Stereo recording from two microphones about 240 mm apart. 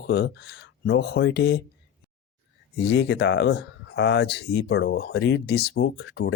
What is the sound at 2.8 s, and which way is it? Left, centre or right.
Speech, left.